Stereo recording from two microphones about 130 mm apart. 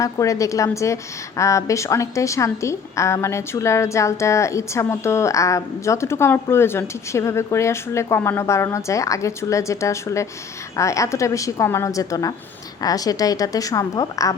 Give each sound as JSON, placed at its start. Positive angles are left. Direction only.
{"t": 0.0, "sound": "a woman's voice", "side_deg": 25}